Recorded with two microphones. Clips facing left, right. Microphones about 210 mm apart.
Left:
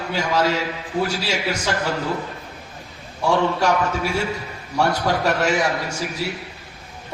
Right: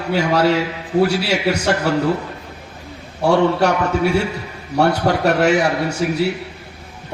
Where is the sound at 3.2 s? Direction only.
65° right (ahead or behind).